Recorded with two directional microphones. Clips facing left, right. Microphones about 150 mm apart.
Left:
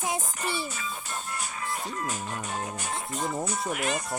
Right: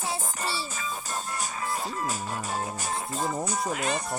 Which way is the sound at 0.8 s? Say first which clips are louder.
Right 2 dB; 40° right (ahead or behind).